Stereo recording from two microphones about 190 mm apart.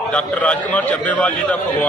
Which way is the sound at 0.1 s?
5° left (ahead or behind).